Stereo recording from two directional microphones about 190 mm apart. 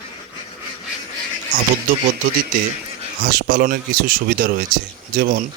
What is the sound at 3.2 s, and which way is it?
Speech, 50° right (ahead or behind).